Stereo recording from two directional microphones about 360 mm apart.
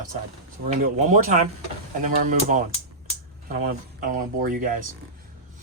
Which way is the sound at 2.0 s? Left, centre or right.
Right.